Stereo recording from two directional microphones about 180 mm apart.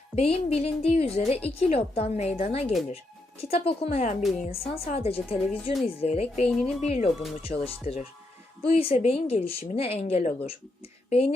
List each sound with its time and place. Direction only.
0.2 s a woman's voice: 35° left (ahead or behind)